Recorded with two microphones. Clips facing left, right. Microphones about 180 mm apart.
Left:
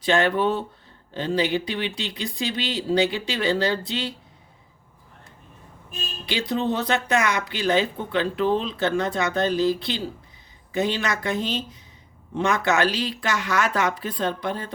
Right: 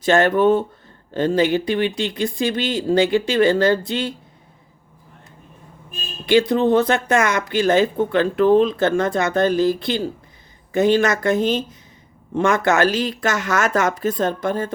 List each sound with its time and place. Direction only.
0.0 s speech: 45° right (ahead or behind)
6.2 s speech: 50° right (ahead or behind)